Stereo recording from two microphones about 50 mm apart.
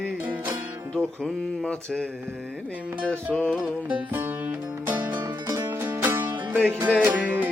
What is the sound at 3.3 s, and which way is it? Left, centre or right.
Music, left.